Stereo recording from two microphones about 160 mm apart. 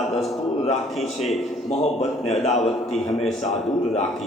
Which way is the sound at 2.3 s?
45° left (ahead or behind).